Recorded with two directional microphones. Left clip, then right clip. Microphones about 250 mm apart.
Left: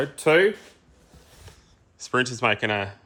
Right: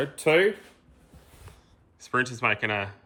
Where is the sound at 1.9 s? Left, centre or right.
Centre.